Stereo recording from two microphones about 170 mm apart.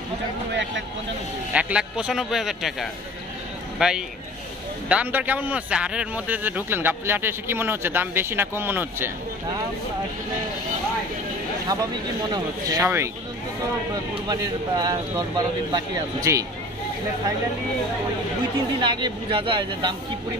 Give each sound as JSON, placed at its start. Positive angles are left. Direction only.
{"t": 0.5, "sound": "speech", "side_deg": -90}
{"t": 1.5, "sound": "a man's voice", "side_deg": -5}
{"t": 12.7, "sound": "a man's voice", "side_deg": -15}
{"t": 14.1, "sound": "speech", "side_deg": -25}
{"t": 18.8, "sound": "speech", "side_deg": -30}